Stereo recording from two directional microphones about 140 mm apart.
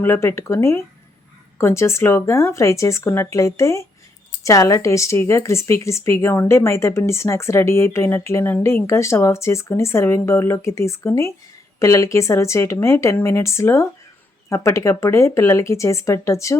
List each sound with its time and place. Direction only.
0.0 s a woman's voice: 20° left (ahead or behind)